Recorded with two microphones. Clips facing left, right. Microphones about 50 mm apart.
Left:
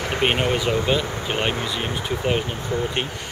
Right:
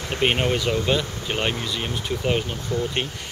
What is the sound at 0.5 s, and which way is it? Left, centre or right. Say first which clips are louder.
Speech: left 1 dB; left.